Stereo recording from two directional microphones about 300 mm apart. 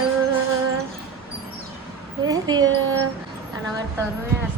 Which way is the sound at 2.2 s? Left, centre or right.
Centre.